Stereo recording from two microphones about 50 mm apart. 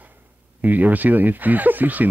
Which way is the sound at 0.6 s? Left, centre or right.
Right.